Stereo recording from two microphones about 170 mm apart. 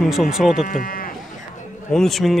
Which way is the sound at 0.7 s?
55° left (ahead or behind).